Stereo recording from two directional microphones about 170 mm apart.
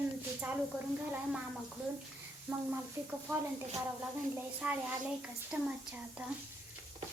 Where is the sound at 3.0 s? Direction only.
15° right (ahead or behind).